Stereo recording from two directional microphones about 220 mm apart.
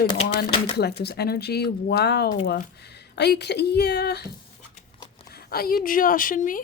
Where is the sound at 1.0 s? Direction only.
45° left (ahead or behind).